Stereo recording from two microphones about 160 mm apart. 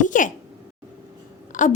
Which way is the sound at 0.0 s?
55° left (ahead or behind).